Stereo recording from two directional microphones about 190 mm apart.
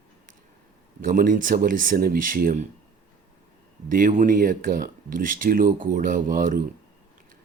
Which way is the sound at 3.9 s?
45° right (ahead or behind).